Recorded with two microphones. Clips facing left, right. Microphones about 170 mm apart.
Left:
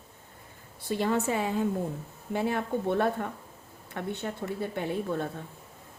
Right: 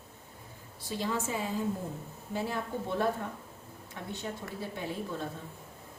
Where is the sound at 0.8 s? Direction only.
60° left (ahead or behind).